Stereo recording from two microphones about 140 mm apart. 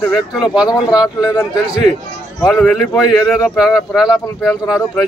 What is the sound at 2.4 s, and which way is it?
A man's voice, centre (ahead or behind).